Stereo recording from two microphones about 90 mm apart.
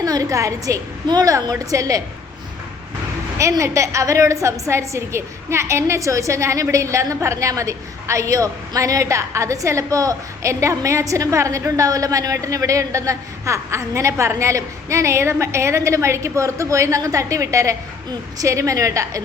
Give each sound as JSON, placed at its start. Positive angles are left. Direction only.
{"t": 0.0, "sound": "a woman's voice", "side_deg": -40}
{"t": 3.6, "sound": "a woman's voice", "side_deg": -35}